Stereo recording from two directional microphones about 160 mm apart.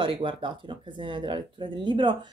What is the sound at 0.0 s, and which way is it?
Speech, 30° right (ahead or behind).